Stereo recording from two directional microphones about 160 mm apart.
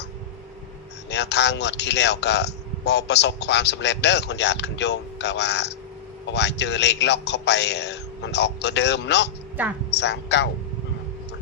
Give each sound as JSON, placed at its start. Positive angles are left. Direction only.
{"t": 1.1, "sound": "a man's voice", "side_deg": 90}